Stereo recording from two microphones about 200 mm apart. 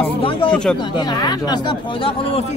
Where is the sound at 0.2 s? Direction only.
25° left (ahead or behind).